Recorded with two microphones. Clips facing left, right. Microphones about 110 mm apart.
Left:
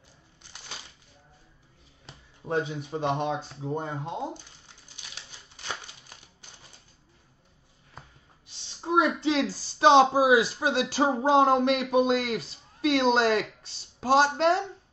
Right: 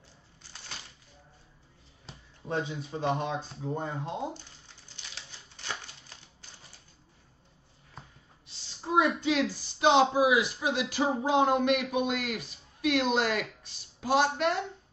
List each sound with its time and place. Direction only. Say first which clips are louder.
2.4 s speech: left 4 dB; 20° left (ahead or behind)
5.7 s music: left 2 dB; 15° left (ahead or behind)
8.8 s speech: left 2 dB; 25° left (ahead or behind)